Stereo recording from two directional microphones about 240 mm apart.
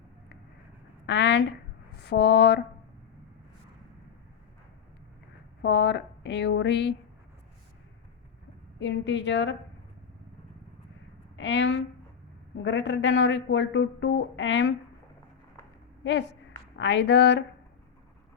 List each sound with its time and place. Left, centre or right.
1.0 s a sound: left
2.0 s speech: left
5.6 s speech: left
8.8 s speech: left
11.3 s speech: left
16.7 s speech: left